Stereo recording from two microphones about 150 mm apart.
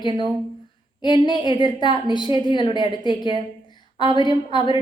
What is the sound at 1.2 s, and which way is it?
A woman's voice, 30° left (ahead or behind).